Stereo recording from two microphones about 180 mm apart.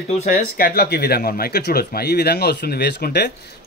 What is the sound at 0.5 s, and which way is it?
Speech, 60° left (ahead or behind).